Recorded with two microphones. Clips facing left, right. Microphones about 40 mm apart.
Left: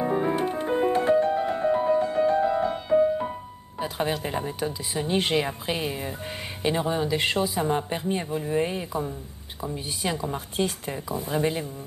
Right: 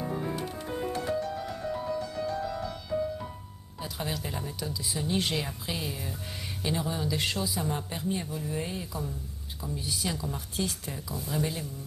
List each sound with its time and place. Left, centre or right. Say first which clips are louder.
0.0 s music: left 9 dB; left
3.8 s speech: left 8 dB; left